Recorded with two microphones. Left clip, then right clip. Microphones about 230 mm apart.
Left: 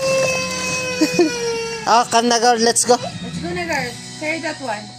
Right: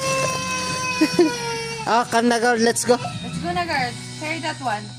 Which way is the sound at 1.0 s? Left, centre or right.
Centre.